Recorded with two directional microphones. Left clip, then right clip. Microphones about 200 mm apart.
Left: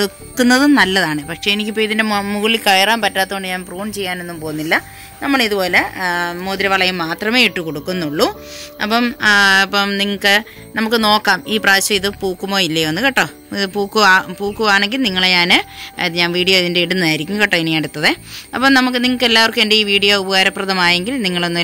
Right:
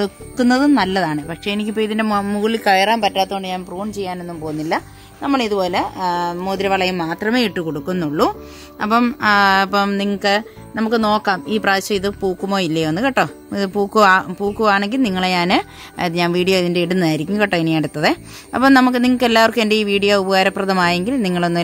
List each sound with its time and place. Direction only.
0.0 s speech: 10° right (ahead or behind); by 21.5 s 40° right (ahead or behind)